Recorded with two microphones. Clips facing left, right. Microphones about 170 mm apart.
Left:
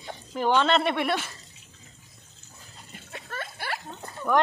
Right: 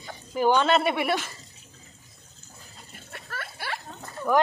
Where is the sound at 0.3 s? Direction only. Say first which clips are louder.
Right 2 dB; 5° right (ahead or behind).